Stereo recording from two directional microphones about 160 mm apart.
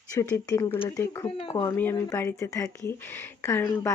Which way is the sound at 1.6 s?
15° left (ahead or behind).